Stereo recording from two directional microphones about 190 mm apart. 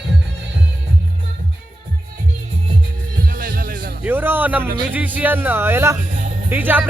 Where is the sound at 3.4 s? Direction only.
50° right (ahead or behind).